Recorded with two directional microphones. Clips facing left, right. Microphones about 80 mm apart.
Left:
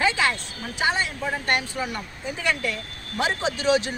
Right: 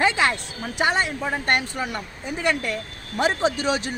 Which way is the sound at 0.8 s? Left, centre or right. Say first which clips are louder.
Right 2 dB; right.